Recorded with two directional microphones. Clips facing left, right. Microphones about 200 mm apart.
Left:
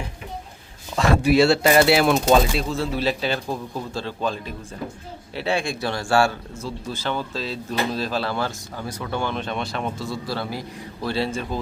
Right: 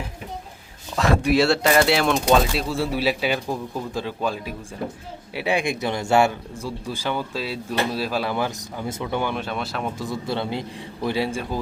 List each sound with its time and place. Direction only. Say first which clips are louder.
0.9 s speech: left 2 dB; centre (ahead or behind)
10.0 s speech: right 2 dB; 20° right (ahead or behind)